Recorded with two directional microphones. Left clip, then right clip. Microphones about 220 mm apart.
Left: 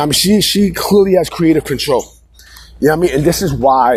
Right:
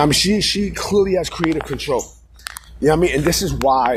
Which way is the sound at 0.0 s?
40° left (ahead or behind).